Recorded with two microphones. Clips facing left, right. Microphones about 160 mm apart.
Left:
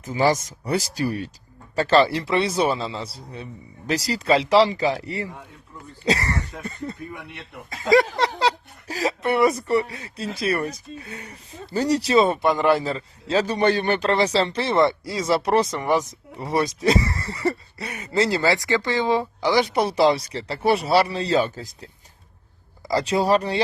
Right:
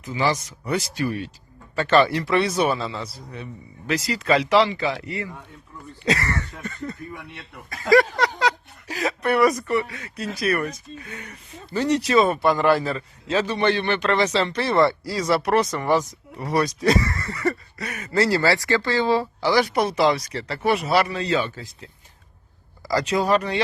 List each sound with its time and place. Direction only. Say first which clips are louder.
0.0 s a man's voice: left 3 dB; 40° left (ahead or behind)
23.0 s a man's voice: left 1 dB; 30° left (ahead or behind)